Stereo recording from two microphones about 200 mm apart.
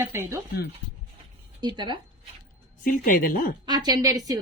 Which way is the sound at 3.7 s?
20° right (ahead or behind).